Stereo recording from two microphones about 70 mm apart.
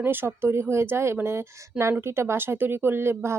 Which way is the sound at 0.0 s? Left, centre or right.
Right.